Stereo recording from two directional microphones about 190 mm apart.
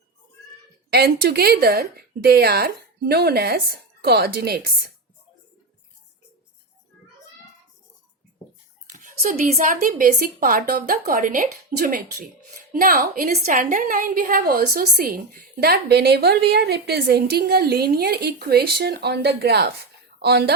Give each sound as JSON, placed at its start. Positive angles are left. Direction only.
{"t": 0.9, "sound": "a woman's voice", "side_deg": -55}
{"t": 8.9, "sound": "a sound", "side_deg": -45}
{"t": 9.5, "sound": "a woman's voice", "side_deg": -35}